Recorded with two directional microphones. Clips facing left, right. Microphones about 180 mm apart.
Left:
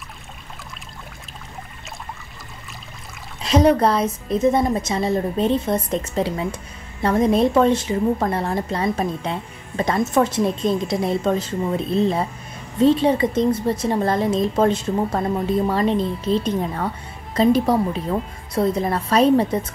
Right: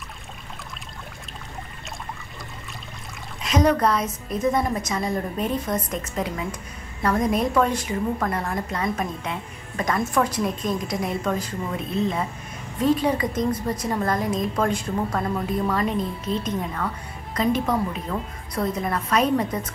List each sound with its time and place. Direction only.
3.4 s a woman's voice: 30° left (ahead or behind)